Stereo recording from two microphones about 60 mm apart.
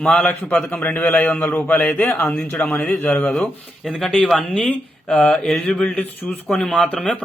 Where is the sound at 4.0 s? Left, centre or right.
Centre.